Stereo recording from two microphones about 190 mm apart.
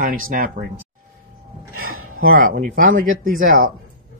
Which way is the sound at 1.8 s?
90° right.